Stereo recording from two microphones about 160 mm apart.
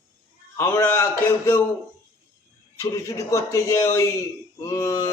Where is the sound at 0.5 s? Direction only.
15° left (ahead or behind).